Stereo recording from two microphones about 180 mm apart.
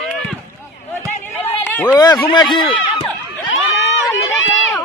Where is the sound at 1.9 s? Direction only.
20° left (ahead or behind).